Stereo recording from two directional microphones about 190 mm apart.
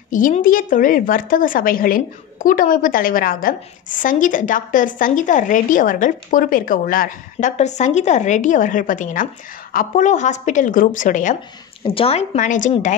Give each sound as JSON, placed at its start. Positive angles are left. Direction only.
{"t": 0.1, "sound": "a woman's voice", "side_deg": 45}
{"t": 11.8, "sound": "a woman's voice", "side_deg": 30}